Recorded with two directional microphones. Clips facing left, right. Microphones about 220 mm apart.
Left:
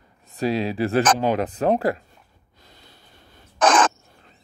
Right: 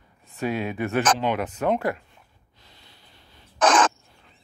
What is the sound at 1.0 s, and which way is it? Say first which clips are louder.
Speech: left 3 dB; 45° left (ahead or behind).